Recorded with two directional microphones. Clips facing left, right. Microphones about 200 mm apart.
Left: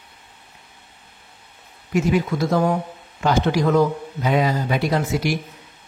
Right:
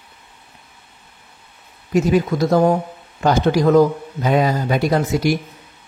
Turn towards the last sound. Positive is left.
turn(degrees=-45)  # may be behind; listen again after turning